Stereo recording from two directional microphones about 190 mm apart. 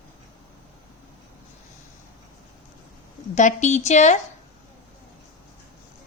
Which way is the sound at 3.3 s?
40° left (ahead or behind).